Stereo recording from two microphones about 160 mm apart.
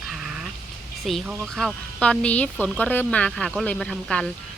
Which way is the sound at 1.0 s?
Centre (ahead or behind).